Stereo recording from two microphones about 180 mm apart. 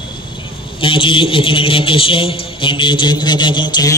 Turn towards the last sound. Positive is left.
turn(degrees=25)  # may be behind; listen again after turning